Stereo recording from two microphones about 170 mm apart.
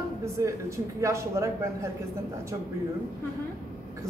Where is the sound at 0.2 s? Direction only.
15° right (ahead or behind).